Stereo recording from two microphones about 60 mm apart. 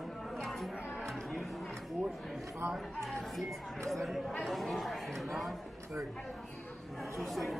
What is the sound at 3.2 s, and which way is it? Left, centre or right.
Speech, centre.